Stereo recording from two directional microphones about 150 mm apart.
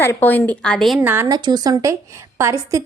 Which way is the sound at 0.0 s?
15° left (ahead or behind).